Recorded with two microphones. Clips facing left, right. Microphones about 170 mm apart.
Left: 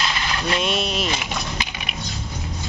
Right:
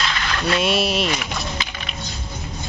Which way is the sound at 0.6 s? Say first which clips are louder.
Right 3 dB; 5° right (ahead or behind).